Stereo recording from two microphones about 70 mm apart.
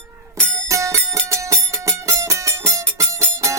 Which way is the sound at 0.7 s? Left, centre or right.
Right.